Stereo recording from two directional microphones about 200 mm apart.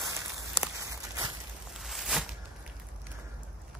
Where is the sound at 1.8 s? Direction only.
Centre (ahead or behind).